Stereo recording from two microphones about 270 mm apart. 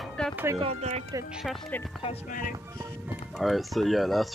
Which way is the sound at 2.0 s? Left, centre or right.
Left.